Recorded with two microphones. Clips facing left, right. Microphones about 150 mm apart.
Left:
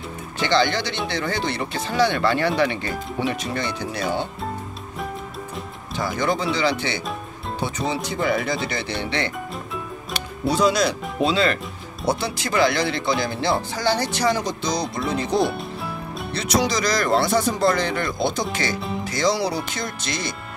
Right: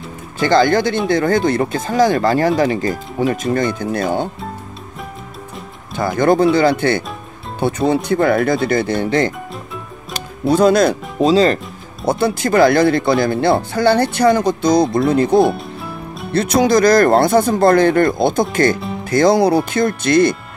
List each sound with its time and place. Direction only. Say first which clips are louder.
0.4 s speech: right 8 dB; 45° right (ahead or behind)
5.9 s speech: right 9 dB; 55° right (ahead or behind)
12.1 s speech: right 8 dB; 50° right (ahead or behind)